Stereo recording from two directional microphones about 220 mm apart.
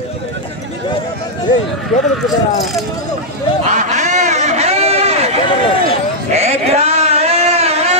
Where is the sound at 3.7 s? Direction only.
35° right (ahead or behind).